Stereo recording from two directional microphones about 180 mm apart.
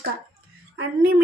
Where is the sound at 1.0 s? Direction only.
55° right (ahead or behind).